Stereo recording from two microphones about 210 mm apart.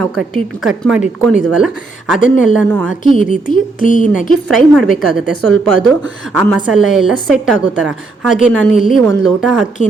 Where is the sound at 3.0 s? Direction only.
40° left (ahead or behind).